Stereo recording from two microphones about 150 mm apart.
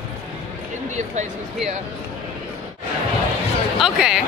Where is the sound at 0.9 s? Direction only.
50° right (ahead or behind).